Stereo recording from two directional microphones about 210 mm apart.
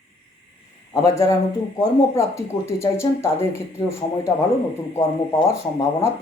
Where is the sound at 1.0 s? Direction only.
15° left (ahead or behind).